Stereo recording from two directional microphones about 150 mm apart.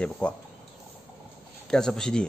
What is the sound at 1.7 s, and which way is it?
Speech, 5° left (ahead or behind).